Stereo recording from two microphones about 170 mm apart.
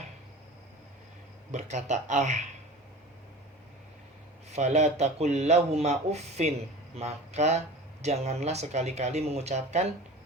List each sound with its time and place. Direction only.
1.5 s speech: 45° right (ahead or behind)
4.5 s speech: 40° right (ahead or behind)